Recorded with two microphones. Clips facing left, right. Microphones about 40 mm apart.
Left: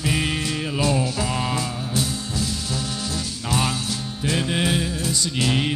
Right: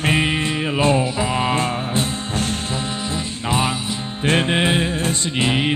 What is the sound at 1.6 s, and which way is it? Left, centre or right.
Music, right.